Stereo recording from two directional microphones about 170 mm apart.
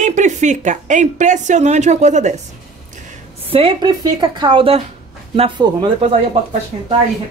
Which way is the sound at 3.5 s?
30° right (ahead or behind).